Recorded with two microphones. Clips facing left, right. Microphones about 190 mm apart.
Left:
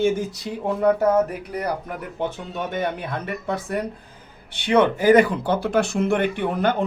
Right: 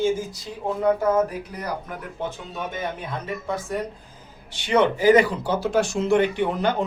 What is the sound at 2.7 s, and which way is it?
Speech, 65° left (ahead or behind).